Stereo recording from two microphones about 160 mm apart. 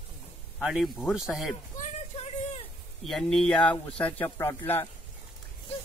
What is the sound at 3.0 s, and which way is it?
Speech, centre (ahead or behind).